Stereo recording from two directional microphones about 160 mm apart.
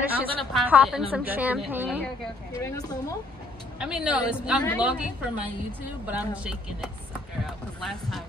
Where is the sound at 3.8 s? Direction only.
5° right (ahead or behind).